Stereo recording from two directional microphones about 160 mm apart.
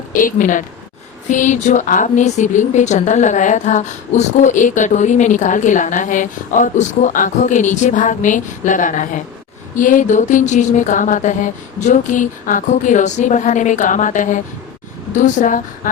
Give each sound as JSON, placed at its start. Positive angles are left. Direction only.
{"t": 0.1, "sound": "speech", "side_deg": 60}